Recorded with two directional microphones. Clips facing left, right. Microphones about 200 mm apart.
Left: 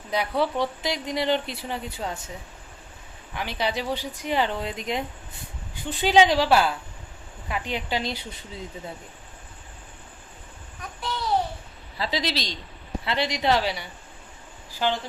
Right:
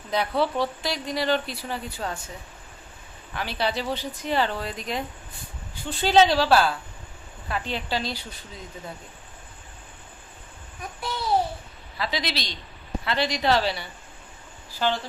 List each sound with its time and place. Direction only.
0.1 s speech: 10° left (ahead or behind)
3.3 s speech: 15° left (ahead or behind)
11.9 s a man's voice: 35° left (ahead or behind)
13.1 s speech: 20° left (ahead or behind)